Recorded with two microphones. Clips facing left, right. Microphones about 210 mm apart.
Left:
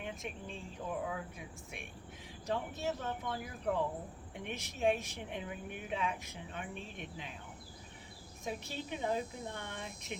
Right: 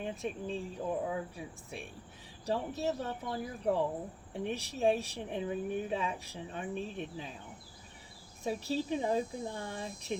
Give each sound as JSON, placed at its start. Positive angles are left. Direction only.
{"t": 0.0, "sound": "a woman's voice", "side_deg": -35}
{"t": 8.4, "sound": "a woman's voice", "side_deg": -35}